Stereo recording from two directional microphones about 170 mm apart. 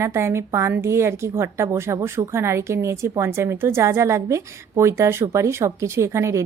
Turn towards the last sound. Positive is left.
turn(degrees=-15)  # may be behind; listen again after turning